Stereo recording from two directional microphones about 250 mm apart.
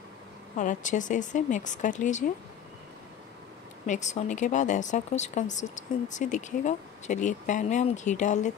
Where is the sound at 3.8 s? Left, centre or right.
Left.